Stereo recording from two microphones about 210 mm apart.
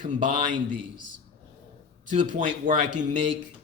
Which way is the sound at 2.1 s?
40° right (ahead or behind).